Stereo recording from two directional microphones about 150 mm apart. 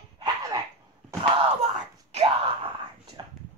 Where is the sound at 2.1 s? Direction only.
40° right (ahead or behind).